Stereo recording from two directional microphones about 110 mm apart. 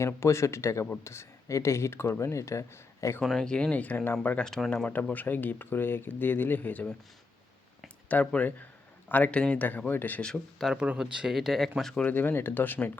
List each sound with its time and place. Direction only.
0.0 s speech: 25° left (ahead or behind)
3.2 s speech: 5° left (ahead or behind)
8.0 s speech: 15° left (ahead or behind)
10.6 s speech: 5° right (ahead or behind); by 12.9 s 15° left (ahead or behind)